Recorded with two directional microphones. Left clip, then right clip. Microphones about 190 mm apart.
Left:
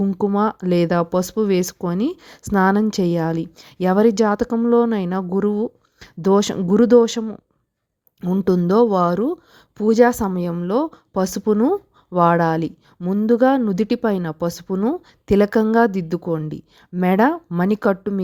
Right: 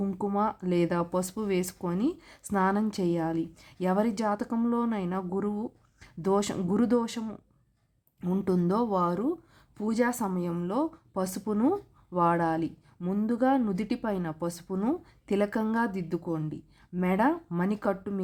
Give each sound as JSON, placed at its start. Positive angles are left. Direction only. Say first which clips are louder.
{"t": 0.0, "sound": "speech", "louder": "left 11 dB", "side_deg": 25}
{"t": 0.3, "sound": "a woman's voice", "louder": "left 7 dB", "side_deg": 35}